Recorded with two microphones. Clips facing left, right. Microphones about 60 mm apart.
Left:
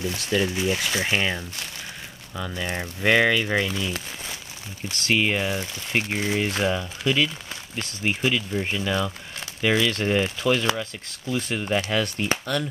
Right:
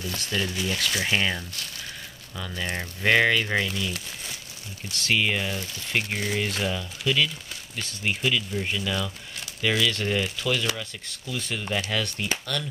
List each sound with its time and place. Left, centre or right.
0.0 s speech: left
3.6 s speech: left